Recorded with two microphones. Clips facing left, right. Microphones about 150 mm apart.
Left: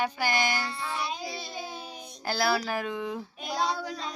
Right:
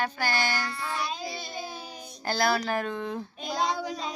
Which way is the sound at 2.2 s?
5° left (ahead or behind).